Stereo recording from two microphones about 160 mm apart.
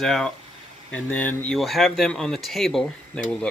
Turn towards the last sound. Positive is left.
turn(degrees=0)  # may be behind; listen again after turning